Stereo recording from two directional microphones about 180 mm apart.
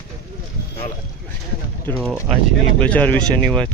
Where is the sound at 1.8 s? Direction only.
5° left (ahead or behind).